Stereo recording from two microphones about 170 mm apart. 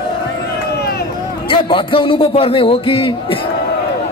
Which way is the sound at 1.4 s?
30° left (ahead or behind).